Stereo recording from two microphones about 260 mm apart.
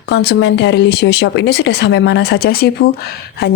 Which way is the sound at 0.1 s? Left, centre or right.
Left.